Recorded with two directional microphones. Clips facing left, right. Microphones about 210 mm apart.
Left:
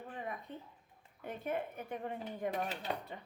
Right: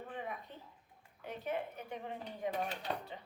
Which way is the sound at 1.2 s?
50° left (ahead or behind).